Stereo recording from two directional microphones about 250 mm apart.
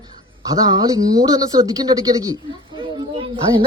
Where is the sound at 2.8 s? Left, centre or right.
Right.